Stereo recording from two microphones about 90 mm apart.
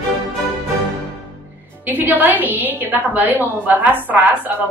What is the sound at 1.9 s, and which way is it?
A woman's voice, 20° right (ahead or behind).